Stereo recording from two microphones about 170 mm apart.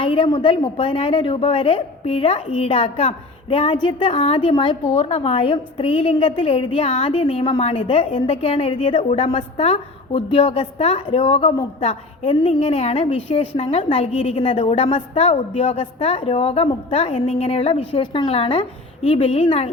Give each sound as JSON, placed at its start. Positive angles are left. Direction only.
{"t": 0.0, "sound": "a woman's voice", "side_deg": 30}